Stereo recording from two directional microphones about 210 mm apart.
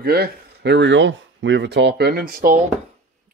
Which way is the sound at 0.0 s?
45° right (ahead or behind).